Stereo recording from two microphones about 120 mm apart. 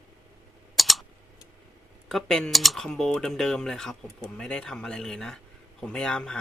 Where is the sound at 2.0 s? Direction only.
5° left (ahead or behind).